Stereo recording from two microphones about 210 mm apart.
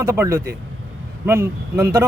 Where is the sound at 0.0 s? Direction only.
15° right (ahead or behind).